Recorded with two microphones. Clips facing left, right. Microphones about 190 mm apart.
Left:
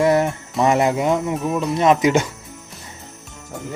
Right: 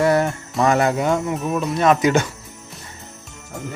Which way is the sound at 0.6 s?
20° left (ahead or behind).